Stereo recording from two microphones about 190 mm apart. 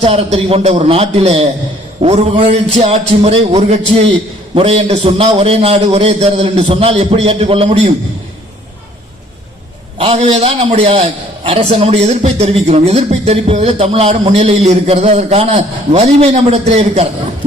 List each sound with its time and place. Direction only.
0.0 s a man's voice: 30° right (ahead or behind)
10.0 s a man's voice: 30° right (ahead or behind)